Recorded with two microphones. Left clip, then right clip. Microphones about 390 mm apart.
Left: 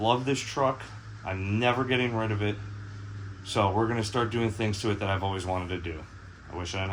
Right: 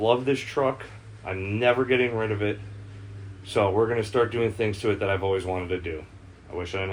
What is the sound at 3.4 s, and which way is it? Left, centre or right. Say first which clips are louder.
Speech: right 4 dB; centre.